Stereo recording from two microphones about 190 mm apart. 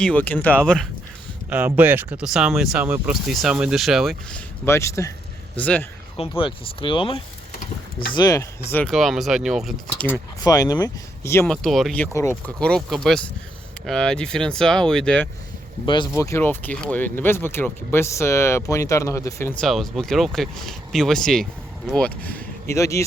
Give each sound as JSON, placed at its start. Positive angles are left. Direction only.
{"t": 0.0, "sound": "speech", "side_deg": 10}
{"t": 1.5, "sound": "speech", "side_deg": -10}
{"t": 6.1, "sound": "speech", "side_deg": 30}
{"t": 10.1, "sound": "speech", "side_deg": 15}
{"t": 11.5, "sound": "speech", "side_deg": 0}
{"t": 12.1, "sound": "speech", "side_deg": 10}